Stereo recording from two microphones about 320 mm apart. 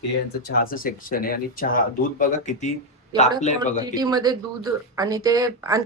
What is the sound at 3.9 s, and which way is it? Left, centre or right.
A woman's voice, centre.